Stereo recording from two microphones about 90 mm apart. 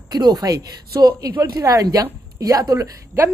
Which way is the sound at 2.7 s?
30° right (ahead or behind).